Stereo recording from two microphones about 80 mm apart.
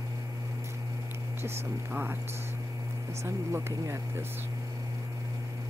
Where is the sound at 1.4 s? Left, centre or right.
Right.